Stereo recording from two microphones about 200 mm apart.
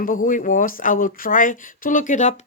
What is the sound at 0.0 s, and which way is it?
Speech, 40° left (ahead or behind).